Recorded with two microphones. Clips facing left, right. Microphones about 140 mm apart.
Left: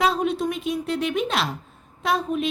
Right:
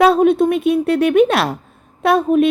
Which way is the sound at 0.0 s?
60° right (ahead or behind).